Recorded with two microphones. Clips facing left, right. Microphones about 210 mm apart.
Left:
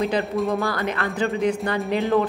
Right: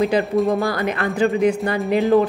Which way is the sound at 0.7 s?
15° right (ahead or behind).